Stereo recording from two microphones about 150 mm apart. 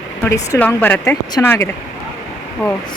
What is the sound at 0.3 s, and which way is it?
A woman's voice, 20° left (ahead or behind).